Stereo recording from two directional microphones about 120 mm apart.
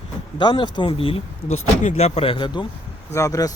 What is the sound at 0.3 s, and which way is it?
Speech, 40° left (ahead or behind).